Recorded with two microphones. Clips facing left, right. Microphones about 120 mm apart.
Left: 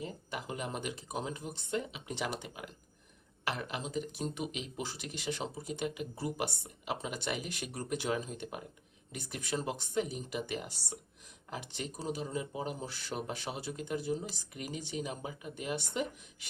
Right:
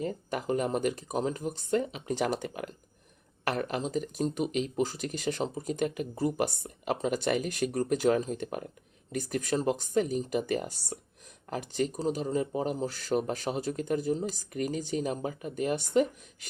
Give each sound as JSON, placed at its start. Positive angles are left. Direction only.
{"t": 0.0, "sound": "speech", "side_deg": -45}